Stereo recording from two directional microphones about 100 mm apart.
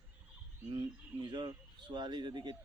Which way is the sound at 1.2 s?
50° right (ahead or behind).